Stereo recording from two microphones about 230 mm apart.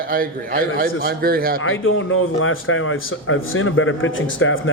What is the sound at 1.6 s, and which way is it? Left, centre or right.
A man's voice, left.